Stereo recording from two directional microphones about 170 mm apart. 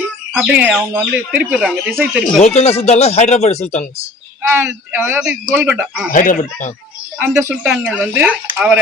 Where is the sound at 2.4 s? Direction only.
40° left (ahead or behind).